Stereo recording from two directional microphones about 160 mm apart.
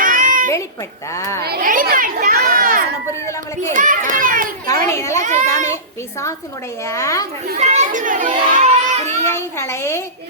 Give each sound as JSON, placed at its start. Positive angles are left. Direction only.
{"t": 0.0, "sound": "a sound", "side_deg": -55}
{"t": 1.1, "sound": "a woman's voice", "side_deg": 20}
{"t": 1.5, "sound": "a child's voice", "side_deg": -65}
{"t": 4.6, "sound": "a child's voice", "side_deg": 20}
{"t": 6.8, "sound": "a woman's voice", "side_deg": 15}
{"t": 7.6, "sound": "a child's voice", "side_deg": -45}
{"t": 9.2, "sound": "a woman's voice", "side_deg": 15}